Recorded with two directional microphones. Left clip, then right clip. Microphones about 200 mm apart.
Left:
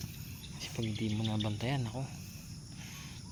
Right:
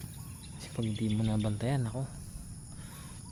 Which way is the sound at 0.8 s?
40° right (ahead or behind).